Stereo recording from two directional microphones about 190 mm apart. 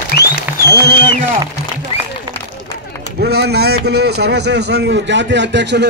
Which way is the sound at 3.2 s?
60° right (ahead or behind).